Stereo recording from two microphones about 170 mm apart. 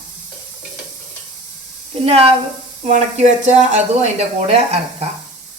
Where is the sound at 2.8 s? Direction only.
45° right (ahead or behind).